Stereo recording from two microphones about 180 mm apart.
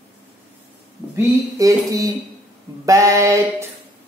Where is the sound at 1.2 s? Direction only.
20° right (ahead or behind).